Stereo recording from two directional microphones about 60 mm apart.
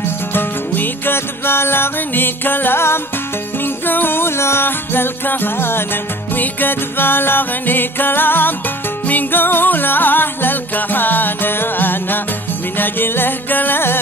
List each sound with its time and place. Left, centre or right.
0.3 s music: left